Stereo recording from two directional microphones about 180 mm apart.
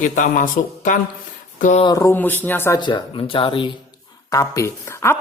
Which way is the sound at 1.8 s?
15° left (ahead or behind).